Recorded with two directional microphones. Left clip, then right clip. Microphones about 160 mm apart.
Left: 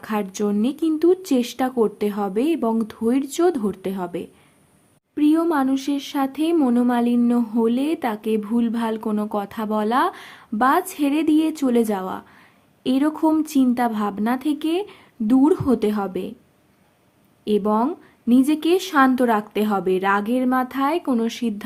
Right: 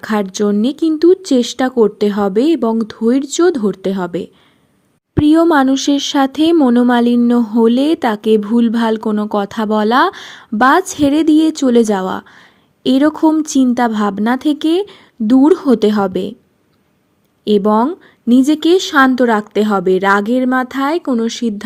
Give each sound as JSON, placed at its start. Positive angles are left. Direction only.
{"t": 0.0, "sound": "speech", "side_deg": -35}
{"t": 5.1, "sound": "speech", "side_deg": -45}
{"t": 17.4, "sound": "speech", "side_deg": -40}